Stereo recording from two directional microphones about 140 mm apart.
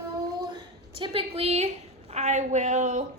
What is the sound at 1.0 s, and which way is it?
A woman's voice, 40° right (ahead or behind).